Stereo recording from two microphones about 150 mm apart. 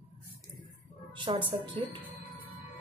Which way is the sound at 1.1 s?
35° right (ahead or behind).